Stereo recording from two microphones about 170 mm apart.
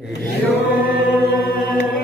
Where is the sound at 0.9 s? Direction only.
75° left (ahead or behind).